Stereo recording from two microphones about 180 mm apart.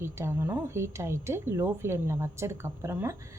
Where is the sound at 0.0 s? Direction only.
15° right (ahead or behind).